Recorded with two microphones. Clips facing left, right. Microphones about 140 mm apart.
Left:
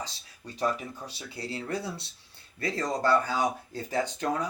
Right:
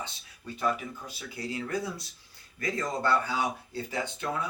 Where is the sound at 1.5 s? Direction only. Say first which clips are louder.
Right 1 dB; 30° left (ahead or behind).